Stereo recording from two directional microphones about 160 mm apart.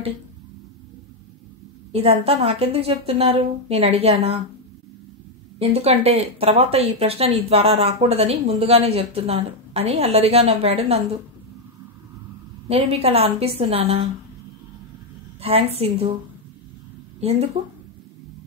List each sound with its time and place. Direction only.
1.9 s speech: 40° right (ahead or behind)
5.6 s speech: 40° right (ahead or behind)
12.6 s speech: 40° right (ahead or behind)
15.4 s speech: 40° right (ahead or behind)
17.2 s speech: 40° right (ahead or behind)